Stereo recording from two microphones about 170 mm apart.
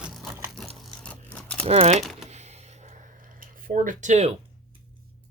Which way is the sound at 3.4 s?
55° right (ahead or behind).